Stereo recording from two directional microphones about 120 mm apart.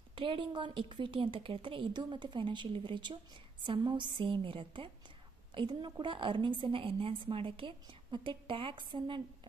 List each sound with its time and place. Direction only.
0.1 s a woman's voice: 45° right (ahead or behind)